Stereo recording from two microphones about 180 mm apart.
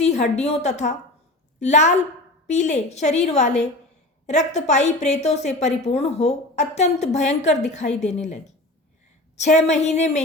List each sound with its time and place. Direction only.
0.0 s a woman's voice: 40° left (ahead or behind)